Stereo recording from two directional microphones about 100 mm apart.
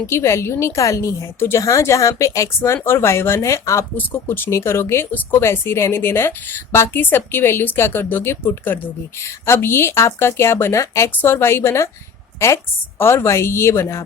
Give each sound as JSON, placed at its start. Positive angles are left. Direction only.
{"t": 0.0, "sound": "speech", "side_deg": 25}